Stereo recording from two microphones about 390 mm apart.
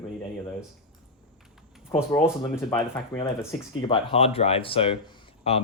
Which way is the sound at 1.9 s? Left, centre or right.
Centre.